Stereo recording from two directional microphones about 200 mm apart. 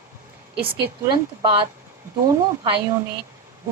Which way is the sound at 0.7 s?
25° right (ahead or behind).